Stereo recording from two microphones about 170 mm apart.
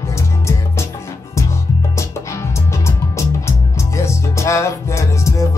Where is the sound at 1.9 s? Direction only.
15° left (ahead or behind).